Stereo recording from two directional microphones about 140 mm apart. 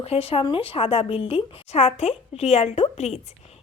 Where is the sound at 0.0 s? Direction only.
45° left (ahead or behind).